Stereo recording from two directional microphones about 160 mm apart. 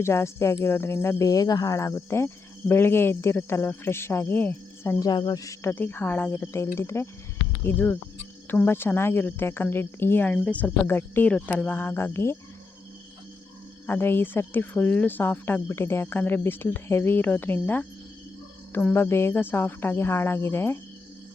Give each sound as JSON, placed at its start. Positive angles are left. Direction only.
{"t": 0.0, "sound": "speech", "side_deg": 15}
{"t": 13.8, "sound": "speech", "side_deg": 15}